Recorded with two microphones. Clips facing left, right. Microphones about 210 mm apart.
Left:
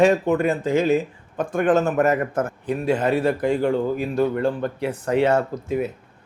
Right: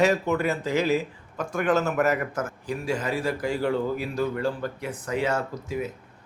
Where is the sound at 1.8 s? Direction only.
30° left (ahead or behind).